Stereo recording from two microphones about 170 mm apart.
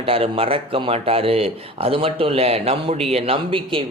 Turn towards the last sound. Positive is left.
turn(degrees=-35)  # may be behind; listen again after turning